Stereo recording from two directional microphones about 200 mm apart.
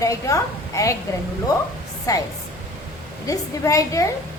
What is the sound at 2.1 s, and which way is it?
Speech, 15° left (ahead or behind).